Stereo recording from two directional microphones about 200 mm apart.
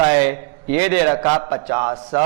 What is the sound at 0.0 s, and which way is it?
A man's voice, 15° right (ahead or behind).